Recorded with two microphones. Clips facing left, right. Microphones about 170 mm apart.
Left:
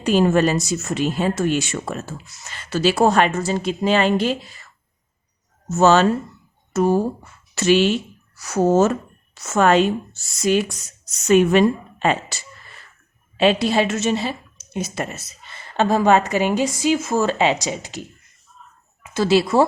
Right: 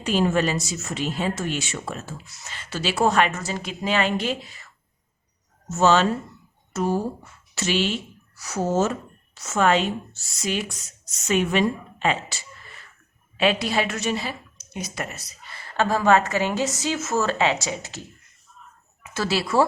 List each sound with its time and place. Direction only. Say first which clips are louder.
0.0 s speech: left 5 dB; 45° left (ahead or behind)
5.7 s a woman's voice: left 4 dB; 45° left (ahead or behind)
13.3 s a woman's voice: left 5 dB; 30° left (ahead or behind)
19.1 s a woman's voice: left 6 dB; 20° left (ahead or behind)